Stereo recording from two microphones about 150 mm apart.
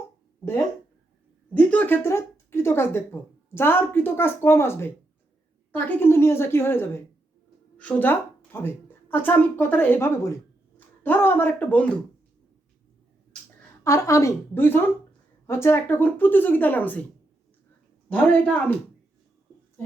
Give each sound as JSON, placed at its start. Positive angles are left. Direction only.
{"t": 1.5, "sound": "speech", "side_deg": 10}
{"t": 13.8, "sound": "a woman's voice", "side_deg": 20}
{"t": 18.1, "sound": "speech", "side_deg": 10}